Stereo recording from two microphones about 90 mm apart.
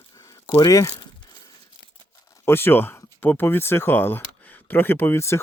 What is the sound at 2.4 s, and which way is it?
Speech, 25° left (ahead or behind).